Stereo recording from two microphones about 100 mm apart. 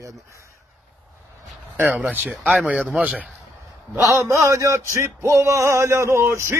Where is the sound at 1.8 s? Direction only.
15° right (ahead or behind).